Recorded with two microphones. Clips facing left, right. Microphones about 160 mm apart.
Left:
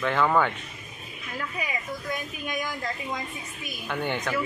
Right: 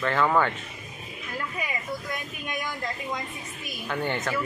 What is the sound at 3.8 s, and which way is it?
Speech, centre (ahead or behind).